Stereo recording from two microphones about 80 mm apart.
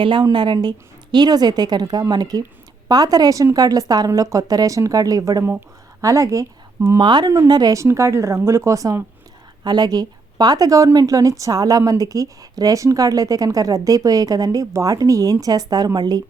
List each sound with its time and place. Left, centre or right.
0.0 s a woman's voice: right
0.3 s speech: right
7.0 s speech: right
7.4 s speech: right
7.8 s speech: right
9.6 s speech: right